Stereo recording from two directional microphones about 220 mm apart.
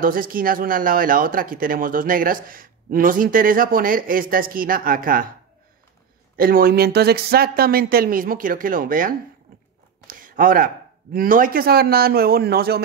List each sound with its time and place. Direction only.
0.0 s a man's voice: 40° right (ahead or behind)
6.3 s speech: 40° right (ahead or behind)
10.0 s a sound: 40° right (ahead or behind)
11.1 s speech: 40° right (ahead or behind)